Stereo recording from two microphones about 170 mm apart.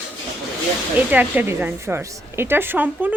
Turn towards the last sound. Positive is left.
turn(degrees=-10)  # may be behind; listen again after turning